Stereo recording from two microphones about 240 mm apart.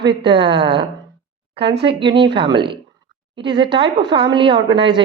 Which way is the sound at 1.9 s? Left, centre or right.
Centre.